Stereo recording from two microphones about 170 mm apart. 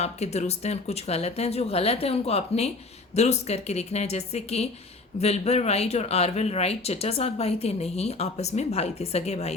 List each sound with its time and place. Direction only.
0.0 s speech: 40° left (ahead or behind)